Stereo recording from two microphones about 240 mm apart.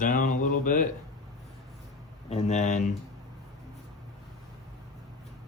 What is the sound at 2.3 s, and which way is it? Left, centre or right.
Speech, left.